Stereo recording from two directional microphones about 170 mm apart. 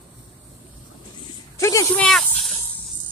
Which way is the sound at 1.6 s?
20° left (ahead or behind).